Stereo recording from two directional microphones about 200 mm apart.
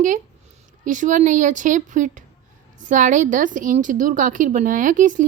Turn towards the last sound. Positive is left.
turn(degrees=-40)  # may be behind; listen again after turning